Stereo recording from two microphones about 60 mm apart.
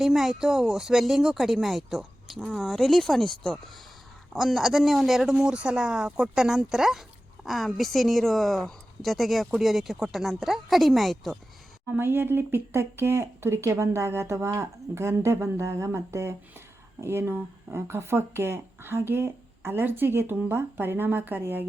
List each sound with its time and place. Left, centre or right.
0.0 s speech: centre
5.3 s speech: centre
11.9 s speech: right